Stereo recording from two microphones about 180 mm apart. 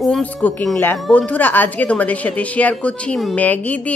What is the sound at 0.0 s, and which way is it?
A woman's voice, 5° left (ahead or behind).